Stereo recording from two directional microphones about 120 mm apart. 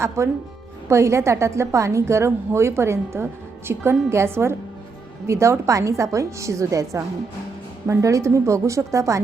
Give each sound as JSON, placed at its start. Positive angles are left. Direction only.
{"t": 0.2, "sound": "a woman's voice", "side_deg": -25}